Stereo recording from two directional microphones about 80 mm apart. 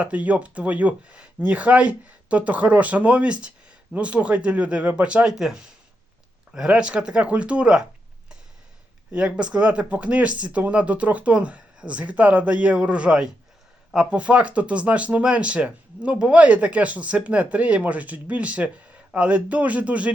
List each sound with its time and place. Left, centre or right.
0.0 s speech: centre
9.1 s speech: centre